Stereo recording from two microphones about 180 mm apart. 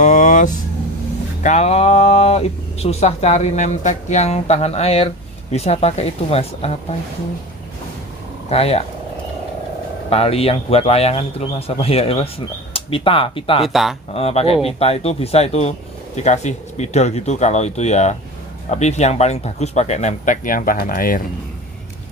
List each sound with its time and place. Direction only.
0.0 s vehicle: 45° left (ahead or behind)
1.4 s speech: 40° left (ahead or behind)
8.5 s speech: 35° left (ahead or behind)
10.0 s speech: 35° left (ahead or behind)
13.7 s speech: centre (ahead or behind)
14.1 s speech: 35° left (ahead or behind); by 21.2 s 50° left (ahead or behind)